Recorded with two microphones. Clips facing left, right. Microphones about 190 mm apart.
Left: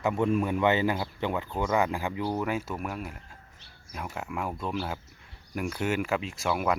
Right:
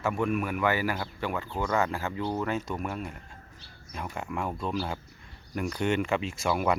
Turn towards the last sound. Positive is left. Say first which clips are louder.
# right 1 dB
turn(degrees=0)  # may be behind; listen again after turning